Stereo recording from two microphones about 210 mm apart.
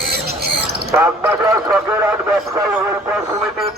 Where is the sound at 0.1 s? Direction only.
50° right (ahead or behind).